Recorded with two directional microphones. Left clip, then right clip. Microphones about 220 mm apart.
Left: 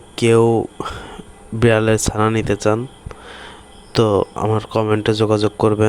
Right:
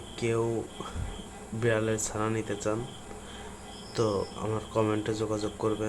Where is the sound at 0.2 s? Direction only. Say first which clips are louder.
Left 16 dB; 45° left (ahead or behind).